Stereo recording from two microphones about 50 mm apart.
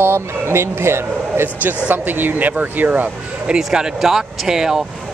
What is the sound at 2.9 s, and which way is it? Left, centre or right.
Speech, right.